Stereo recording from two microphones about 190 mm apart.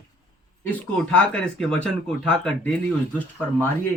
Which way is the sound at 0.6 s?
10° left (ahead or behind).